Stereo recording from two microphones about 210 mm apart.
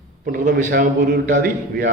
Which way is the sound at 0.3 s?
45° right (ahead or behind).